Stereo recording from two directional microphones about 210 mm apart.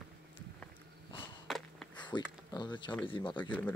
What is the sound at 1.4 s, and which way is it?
Walk, centre (ahead or behind).